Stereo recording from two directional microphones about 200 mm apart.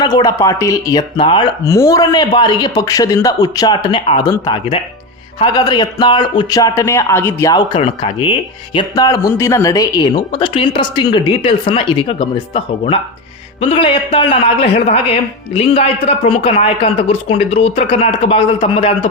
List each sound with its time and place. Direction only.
0.0 s a man's voice: 20° left (ahead or behind)